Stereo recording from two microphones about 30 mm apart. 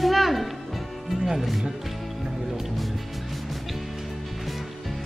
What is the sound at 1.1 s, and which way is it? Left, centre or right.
Music, right.